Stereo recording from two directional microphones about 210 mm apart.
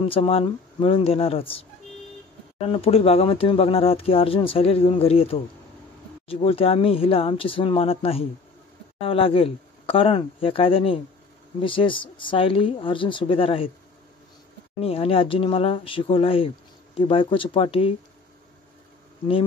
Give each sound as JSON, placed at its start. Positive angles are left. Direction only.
{"t": 0.0, "sound": "speech", "side_deg": 25}
{"t": 2.6, "sound": "speech", "side_deg": 25}
{"t": 14.8, "sound": "speech", "side_deg": 25}